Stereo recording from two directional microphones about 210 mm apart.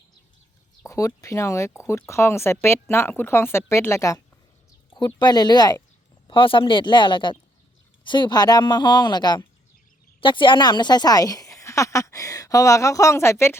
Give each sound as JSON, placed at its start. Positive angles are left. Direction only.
{"t": 0.9, "sound": "a woman's voice", "side_deg": 15}